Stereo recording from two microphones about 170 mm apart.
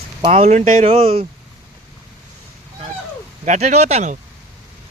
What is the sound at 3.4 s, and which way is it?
Speech, 45° right (ahead or behind).